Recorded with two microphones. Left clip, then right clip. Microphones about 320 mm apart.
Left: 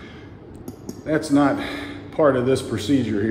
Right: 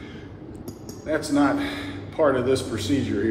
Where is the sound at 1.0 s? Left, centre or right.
Left.